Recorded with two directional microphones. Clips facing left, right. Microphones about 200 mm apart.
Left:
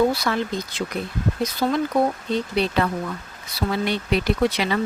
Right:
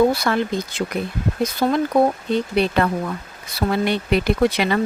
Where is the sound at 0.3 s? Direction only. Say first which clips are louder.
Right 3 dB; 50° right (ahead or behind).